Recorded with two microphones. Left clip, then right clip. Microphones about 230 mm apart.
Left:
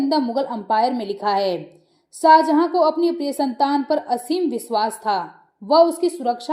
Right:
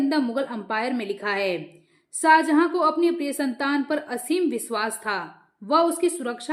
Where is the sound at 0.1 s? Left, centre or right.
Centre.